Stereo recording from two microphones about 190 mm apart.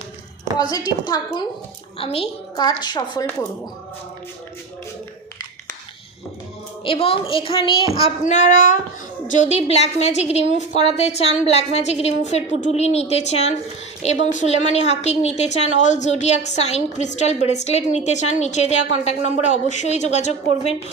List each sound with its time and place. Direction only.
0.7 s a woman's voice: 20° left (ahead or behind)
2.6 s a woman's voice: 20° left (ahead or behind)
6.8 s a woman's voice: 30° left (ahead or behind)